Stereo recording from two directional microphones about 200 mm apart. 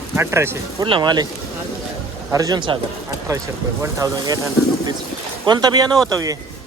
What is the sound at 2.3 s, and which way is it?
Speech, 15° right (ahead or behind).